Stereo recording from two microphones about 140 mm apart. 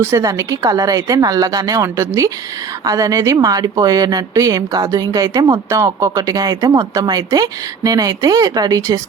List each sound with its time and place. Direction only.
0.0 s a woman's voice: 25° right (ahead or behind)